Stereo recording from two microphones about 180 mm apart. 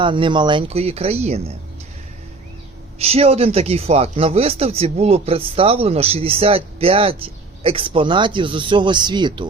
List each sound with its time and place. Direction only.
0.0 s speech: 25° right (ahead or behind)
3.0 s speech: 35° right (ahead or behind)